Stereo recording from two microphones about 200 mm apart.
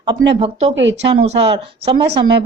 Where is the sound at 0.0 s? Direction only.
25° right (ahead or behind).